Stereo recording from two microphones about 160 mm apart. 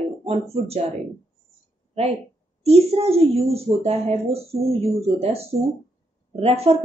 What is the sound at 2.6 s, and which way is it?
Speech, 40° right (ahead or behind).